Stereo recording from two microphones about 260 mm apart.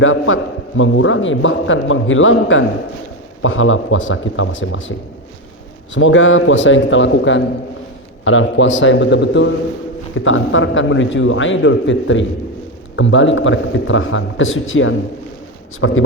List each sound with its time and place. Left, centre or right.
0.0 s a man's voice: left